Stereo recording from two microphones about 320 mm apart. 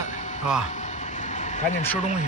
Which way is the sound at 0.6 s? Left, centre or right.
Left.